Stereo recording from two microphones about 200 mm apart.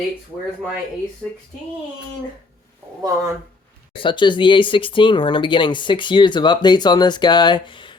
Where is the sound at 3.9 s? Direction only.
25° left (ahead or behind).